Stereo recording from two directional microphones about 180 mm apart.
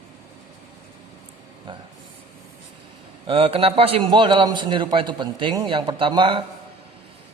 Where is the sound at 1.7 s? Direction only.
25° right (ahead or behind).